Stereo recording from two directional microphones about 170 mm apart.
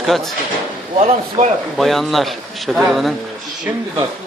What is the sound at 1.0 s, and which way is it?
Speech, 35° right (ahead or behind).